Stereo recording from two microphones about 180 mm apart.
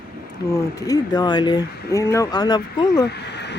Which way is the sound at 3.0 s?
70° left (ahead or behind).